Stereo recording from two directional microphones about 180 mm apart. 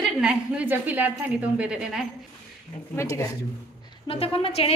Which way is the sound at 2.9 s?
15° left (ahead or behind).